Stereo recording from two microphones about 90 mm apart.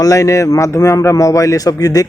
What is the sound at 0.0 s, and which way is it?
A man's voice, 40° left (ahead or behind).